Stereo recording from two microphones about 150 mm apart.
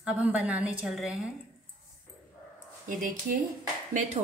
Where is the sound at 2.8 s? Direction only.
60° right (ahead or behind).